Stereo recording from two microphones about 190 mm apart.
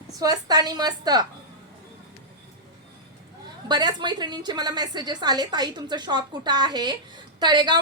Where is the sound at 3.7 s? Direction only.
20° right (ahead or behind).